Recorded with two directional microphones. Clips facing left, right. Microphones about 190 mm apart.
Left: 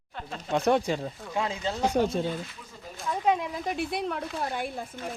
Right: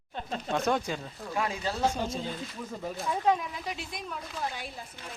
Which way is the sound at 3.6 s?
55° left (ahead or behind).